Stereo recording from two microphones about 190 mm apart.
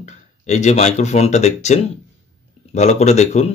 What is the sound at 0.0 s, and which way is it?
Speech, 35° left (ahead or behind).